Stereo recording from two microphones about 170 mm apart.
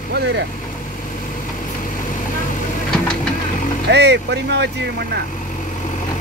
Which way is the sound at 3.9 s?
90° right.